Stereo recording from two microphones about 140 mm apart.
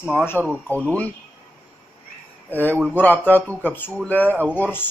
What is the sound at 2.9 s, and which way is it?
Speech, 15° left (ahead or behind).